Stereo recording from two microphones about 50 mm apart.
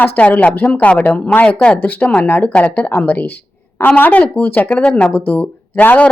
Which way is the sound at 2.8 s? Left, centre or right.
Left.